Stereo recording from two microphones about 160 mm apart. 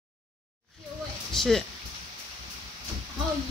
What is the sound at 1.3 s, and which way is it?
Speech, centre (ahead or behind).